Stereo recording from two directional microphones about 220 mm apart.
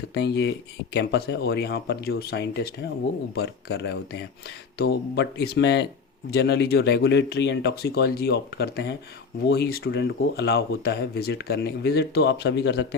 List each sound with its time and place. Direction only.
0.1 s speech: 50° left (ahead or behind)